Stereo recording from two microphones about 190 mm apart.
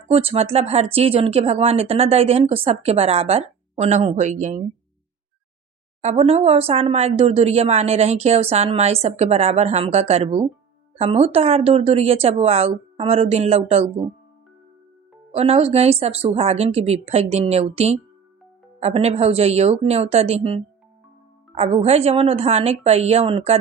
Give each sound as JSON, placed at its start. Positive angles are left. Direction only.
{"t": 0.1, "sound": "speech", "side_deg": -30}
{"t": 6.0, "sound": "speech", "side_deg": -35}
{"t": 15.3, "sound": "speech", "side_deg": -30}